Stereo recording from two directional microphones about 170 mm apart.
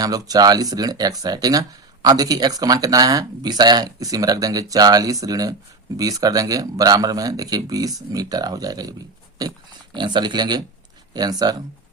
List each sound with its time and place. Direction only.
0.0 s speech: 20° right (ahead or behind)